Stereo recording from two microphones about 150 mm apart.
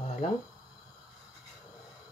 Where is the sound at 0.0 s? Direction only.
45° left (ahead or behind).